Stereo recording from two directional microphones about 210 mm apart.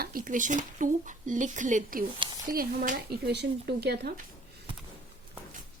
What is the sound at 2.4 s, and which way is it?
Speech, 40° right (ahead or behind).